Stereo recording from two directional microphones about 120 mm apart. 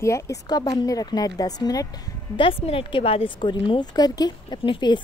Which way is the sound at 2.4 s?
50° left (ahead or behind).